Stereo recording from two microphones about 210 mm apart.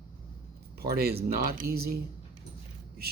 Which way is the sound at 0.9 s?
50° right (ahead or behind).